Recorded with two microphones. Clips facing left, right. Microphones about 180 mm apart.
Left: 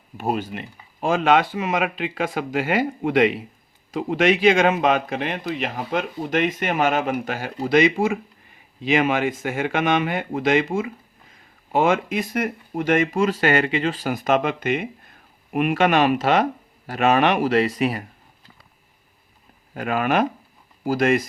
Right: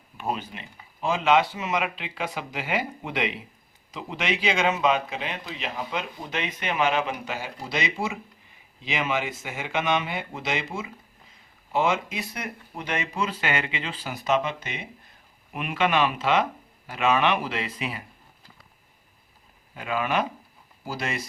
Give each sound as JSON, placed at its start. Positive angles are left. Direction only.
{"t": 0.2, "sound": "a man's voice", "side_deg": 45}
{"t": 19.7, "sound": "a man's voice", "side_deg": 50}